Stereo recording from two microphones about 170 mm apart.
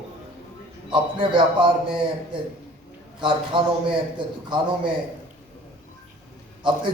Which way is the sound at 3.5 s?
30° right (ahead or behind).